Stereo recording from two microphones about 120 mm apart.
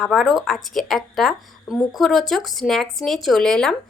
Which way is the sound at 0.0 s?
Centre (ahead or behind).